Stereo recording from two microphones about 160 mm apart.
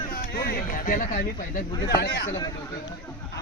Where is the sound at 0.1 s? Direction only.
70° left (ahead or behind).